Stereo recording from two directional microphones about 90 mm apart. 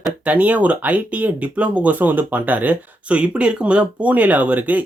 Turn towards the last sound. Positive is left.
turn(degrees=-15)  # may be behind; listen again after turning